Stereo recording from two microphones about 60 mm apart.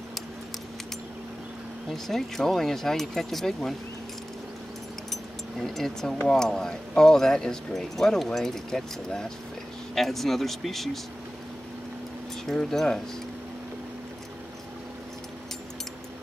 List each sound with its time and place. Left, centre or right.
1.9 s speech: centre
5.1 s a sound: centre
6.2 s speech: centre
12.4 s speech: centre